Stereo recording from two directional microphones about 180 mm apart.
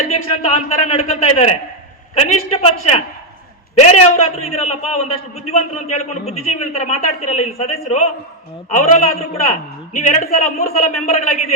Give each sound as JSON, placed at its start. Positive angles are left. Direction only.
{"t": 0.1, "sound": "a man's voice", "side_deg": 35}